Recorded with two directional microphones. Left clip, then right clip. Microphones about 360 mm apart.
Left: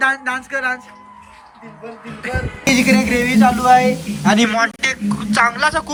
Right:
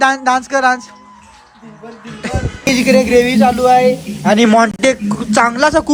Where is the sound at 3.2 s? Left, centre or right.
Centre.